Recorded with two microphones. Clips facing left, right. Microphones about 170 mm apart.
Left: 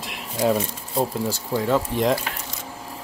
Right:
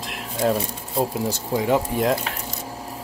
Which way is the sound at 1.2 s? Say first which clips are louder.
Right 1 dB; 15° right (ahead or behind).